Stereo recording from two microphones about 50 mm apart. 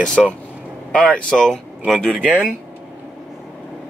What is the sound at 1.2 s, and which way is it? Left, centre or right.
Speech, centre.